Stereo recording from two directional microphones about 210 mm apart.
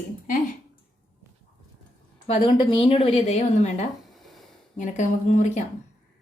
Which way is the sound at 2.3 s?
25° left (ahead or behind).